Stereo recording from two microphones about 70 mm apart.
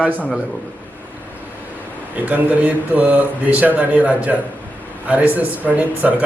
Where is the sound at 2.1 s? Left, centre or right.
Right.